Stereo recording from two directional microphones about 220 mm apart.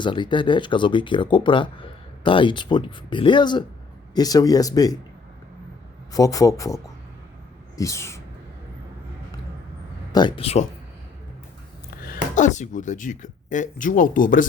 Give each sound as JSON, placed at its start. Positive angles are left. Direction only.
{"t": 0.0, "sound": "speech", "side_deg": 20}
{"t": 6.1, "sound": "speech", "side_deg": 15}
{"t": 10.1, "sound": "speech", "side_deg": 20}
{"t": 12.0, "sound": "speech", "side_deg": 35}